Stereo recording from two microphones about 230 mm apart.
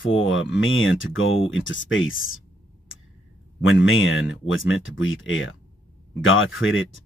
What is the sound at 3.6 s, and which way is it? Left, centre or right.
Speech, left.